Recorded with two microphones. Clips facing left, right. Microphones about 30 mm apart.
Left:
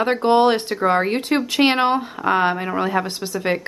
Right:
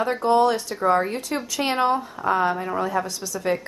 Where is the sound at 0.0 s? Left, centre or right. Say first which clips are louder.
Left 3 dB; left.